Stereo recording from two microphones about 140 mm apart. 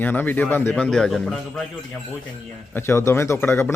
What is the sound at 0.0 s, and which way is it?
Speech, 15° left (ahead or behind).